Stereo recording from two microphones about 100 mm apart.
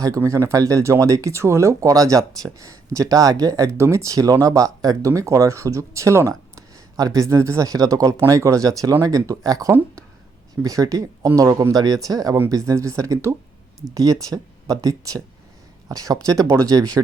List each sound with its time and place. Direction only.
0.2 s speech: 30° right (ahead or behind)